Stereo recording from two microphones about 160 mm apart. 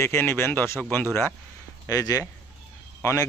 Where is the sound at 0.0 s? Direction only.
15° left (ahead or behind).